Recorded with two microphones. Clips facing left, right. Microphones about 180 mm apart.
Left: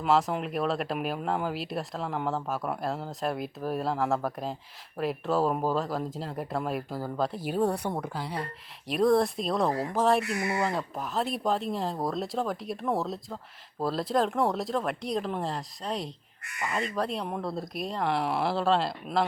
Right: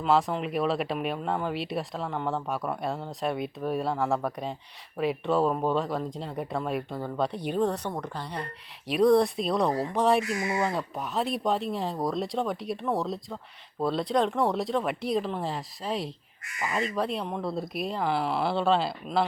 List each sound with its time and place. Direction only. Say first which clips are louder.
0.0 s speech: right 1 dB; centre (ahead or behind)
10.2 s speech: right 1 dB; 65° left (ahead or behind)
10.6 s speech: right 1 dB; centre (ahead or behind)